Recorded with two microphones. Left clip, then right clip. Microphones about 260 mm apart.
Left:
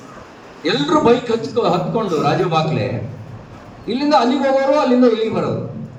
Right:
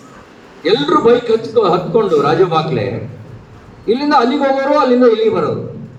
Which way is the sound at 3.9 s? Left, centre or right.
Centre.